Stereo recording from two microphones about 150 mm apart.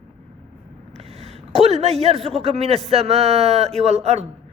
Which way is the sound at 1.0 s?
45° right (ahead or behind).